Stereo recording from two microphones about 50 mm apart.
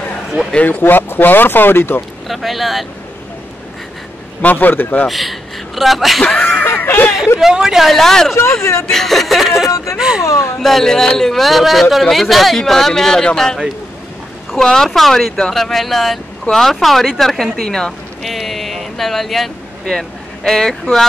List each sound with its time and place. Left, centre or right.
0.7 s speech: left
2.2 s a man's voice: centre
4.4 s a man's voice: left
5.0 s speech: centre
6.2 s speech: centre
6.6 s speech: left
7.3 s speech: centre
7.9 s speech: centre
8.4 s speech: left
8.8 s a man's voice: centre
9.9 s speech: centre
10.2 s speech: left
10.6 s a man's voice: centre
14.6 s a man's voice: centre